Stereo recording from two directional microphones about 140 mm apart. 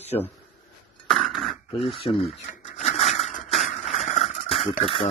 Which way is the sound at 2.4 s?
55° left (ahead or behind).